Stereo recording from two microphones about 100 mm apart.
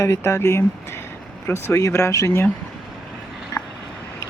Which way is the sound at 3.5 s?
40° left (ahead or behind).